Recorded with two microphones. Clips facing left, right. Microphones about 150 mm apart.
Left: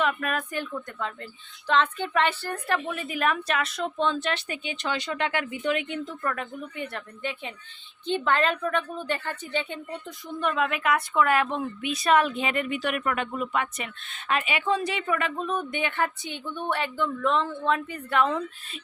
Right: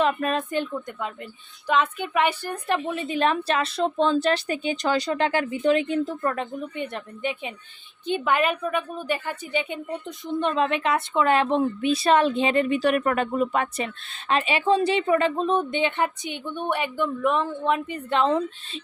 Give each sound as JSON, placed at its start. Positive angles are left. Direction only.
{"t": 0.0, "sound": "a woman's voice", "side_deg": -30}